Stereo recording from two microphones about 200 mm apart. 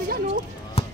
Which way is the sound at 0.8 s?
30° left (ahead or behind).